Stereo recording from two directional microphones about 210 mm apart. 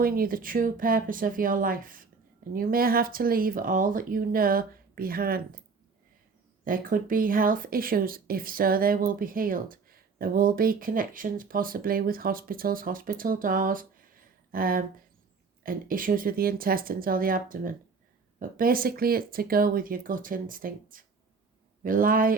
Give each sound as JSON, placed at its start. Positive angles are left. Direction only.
{"t": 0.0, "sound": "speech", "side_deg": -45}
{"t": 6.7, "sound": "speech", "side_deg": -40}